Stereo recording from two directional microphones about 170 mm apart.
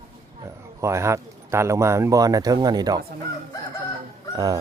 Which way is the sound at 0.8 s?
15° right (ahead or behind).